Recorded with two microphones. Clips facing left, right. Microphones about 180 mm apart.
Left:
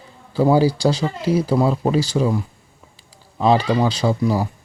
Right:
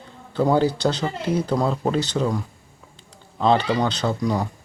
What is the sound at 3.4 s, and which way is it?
Speech, 10° left (ahead or behind).